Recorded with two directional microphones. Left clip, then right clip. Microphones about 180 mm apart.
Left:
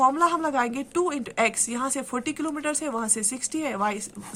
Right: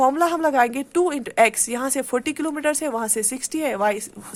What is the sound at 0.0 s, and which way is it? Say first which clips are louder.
A woman's voice: right 3 dB; 35° right (ahead or behind).